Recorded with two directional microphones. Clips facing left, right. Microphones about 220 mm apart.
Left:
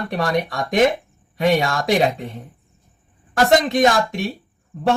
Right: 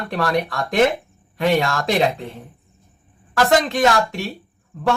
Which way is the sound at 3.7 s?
15° left (ahead or behind).